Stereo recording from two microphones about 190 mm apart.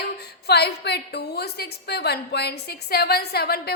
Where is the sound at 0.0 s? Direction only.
60° left (ahead or behind).